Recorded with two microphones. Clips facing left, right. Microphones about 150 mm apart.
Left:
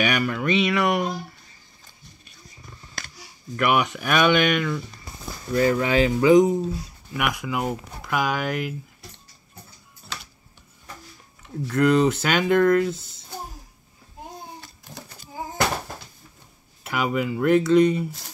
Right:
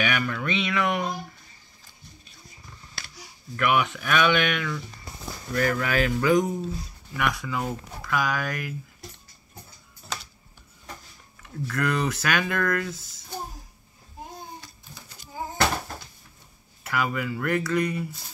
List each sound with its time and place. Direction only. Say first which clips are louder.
0.0 s speech: left 4 dB; 15° left (ahead or behind)
3.5 s speech: left 2 dB; 15° left (ahead or behind)
11.6 s speech: left 8 dB; 25° left (ahead or behind)
16.8 s speech: left 3 dB; 20° left (ahead or behind)